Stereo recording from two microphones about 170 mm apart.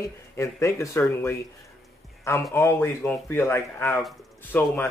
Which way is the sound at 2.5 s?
15° left (ahead or behind).